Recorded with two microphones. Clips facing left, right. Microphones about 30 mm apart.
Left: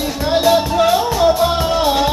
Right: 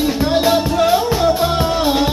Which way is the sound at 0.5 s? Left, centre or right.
Centre.